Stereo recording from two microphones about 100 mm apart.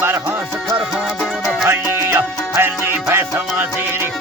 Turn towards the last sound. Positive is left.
turn(degrees=-20)  # may be behind; listen again after turning